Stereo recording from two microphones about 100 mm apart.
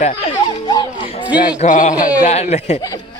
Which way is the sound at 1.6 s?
90° left.